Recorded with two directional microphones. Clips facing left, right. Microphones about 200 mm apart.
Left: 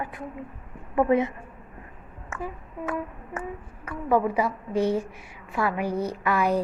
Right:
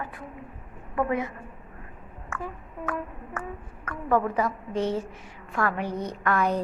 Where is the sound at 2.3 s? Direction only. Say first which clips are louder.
Left 1 dB; 20° left (ahead or behind).